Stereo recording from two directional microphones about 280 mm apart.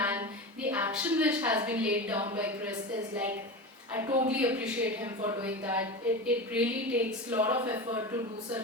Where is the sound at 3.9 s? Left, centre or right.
Centre.